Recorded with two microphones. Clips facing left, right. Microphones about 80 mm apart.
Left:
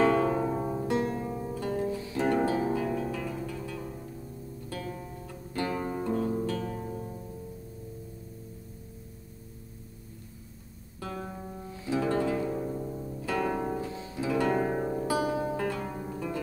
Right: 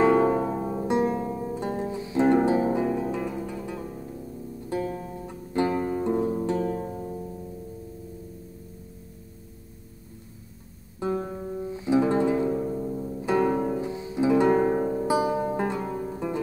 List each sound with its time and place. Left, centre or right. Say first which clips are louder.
0.0 s music: right 4 dB; centre
0.5 s music: right 2 dB; centre
0.8 s music: right 8 dB; right
11.0 s music: right 10 dB; right
11.2 s music: right 8 dB; centre
11.7 s music: right 6 dB; right
12.5 s music: right 5 dB; centre
13.2 s music: right 6 dB; right
14.7 s music: right 5 dB; centre
15.0 s music: right 4 dB; centre